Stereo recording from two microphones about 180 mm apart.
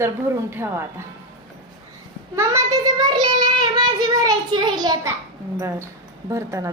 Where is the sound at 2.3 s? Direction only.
15° right (ahead or behind).